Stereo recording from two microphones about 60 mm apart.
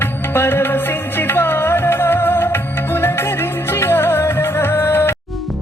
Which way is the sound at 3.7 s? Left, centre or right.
Left.